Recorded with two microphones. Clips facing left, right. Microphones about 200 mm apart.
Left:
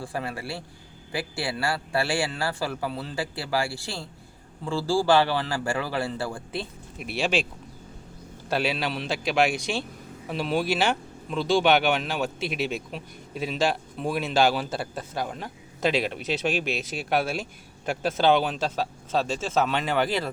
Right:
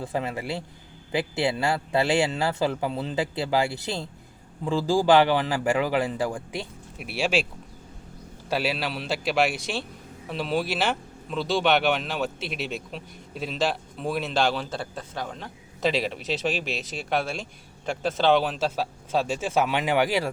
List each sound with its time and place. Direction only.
0.0 s a man's voice: 20° right (ahead or behind)
8.4 s speech: 5° right (ahead or behind)